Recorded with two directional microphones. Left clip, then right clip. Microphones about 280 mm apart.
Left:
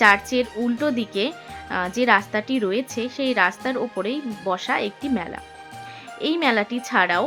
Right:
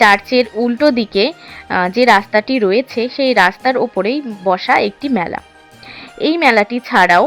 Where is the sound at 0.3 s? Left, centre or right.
Right.